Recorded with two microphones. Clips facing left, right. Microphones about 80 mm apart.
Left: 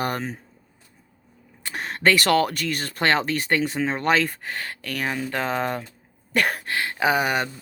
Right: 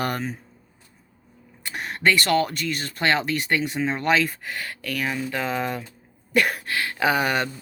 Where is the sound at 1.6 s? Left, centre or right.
Left.